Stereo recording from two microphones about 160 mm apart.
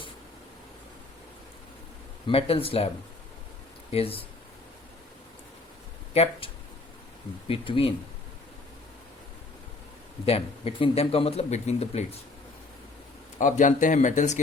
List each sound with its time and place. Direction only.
2.2 s speech: 35° left (ahead or behind)
3.9 s speech: 35° left (ahead or behind)
6.1 s speech: 40° left (ahead or behind)
7.4 s speech: 35° left (ahead or behind)
10.2 s speech: 40° left (ahead or behind)
13.4 s speech: 50° left (ahead or behind)